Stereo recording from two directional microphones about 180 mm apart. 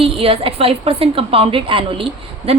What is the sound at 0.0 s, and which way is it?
A woman's voice, 30° right (ahead or behind).